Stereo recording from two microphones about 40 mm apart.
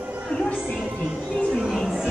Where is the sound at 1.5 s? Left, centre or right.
Centre.